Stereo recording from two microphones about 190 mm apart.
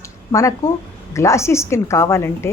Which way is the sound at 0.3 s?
15° left (ahead or behind).